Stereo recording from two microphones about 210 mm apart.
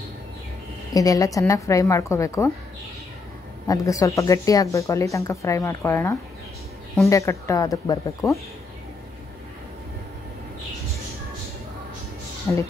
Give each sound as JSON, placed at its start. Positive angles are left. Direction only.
{"t": 0.9, "sound": "speech", "side_deg": 15}
{"t": 3.6, "sound": "speech", "side_deg": 15}
{"t": 12.5, "sound": "speech", "side_deg": 15}